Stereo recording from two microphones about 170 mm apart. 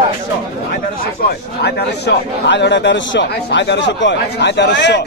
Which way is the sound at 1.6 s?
75° left (ahead or behind).